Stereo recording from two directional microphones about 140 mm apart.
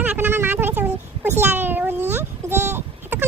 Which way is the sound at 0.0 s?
15° right (ahead or behind).